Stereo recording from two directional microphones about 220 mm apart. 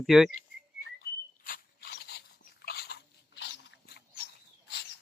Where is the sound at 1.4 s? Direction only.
45° left (ahead or behind).